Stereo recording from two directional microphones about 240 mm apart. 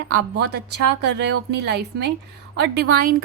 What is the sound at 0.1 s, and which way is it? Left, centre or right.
A woman's voice, right.